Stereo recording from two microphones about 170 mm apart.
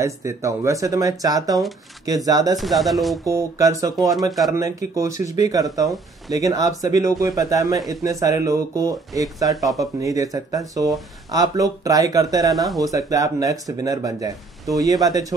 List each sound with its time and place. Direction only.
0.0 s speech: 15° right (ahead or behind)
2.6 s speech: centre (ahead or behind)
3.3 s speech: 20° right (ahead or behind)
12.6 s speech: centre (ahead or behind)
12.9 s speech: 20° right (ahead or behind)